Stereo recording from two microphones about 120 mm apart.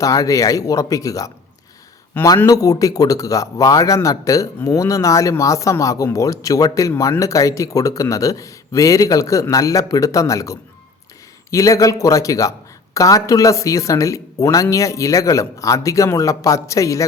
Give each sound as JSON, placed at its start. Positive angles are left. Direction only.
{"t": 0.0, "sound": "a man's voice", "side_deg": 30}
{"t": 2.2, "sound": "speech", "side_deg": 15}
{"t": 2.5, "sound": "a man's voice", "side_deg": 30}